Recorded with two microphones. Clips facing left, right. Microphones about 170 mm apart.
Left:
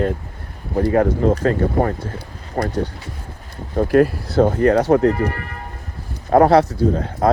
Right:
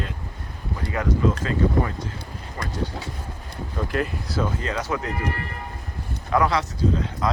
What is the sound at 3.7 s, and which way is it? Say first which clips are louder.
Speech: left 12 dB; 50° left (ahead or behind).